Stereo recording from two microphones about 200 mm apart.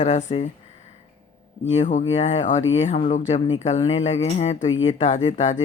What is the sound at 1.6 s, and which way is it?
Speech, 35° left (ahead or behind).